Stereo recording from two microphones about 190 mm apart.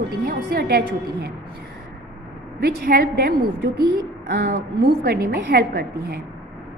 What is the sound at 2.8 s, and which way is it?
A woman's voice, 50° right (ahead or behind).